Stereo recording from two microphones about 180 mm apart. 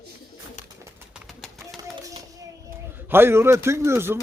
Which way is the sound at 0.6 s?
40° left (ahead or behind).